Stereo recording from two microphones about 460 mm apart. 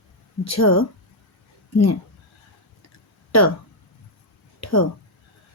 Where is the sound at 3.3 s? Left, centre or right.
Left.